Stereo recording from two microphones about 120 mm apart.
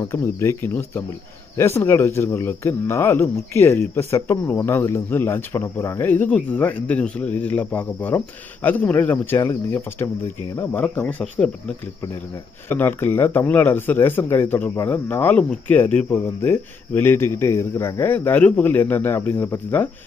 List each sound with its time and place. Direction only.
0.1 s speech: 25° left (ahead or behind)
12.6 s speech: 20° left (ahead or behind)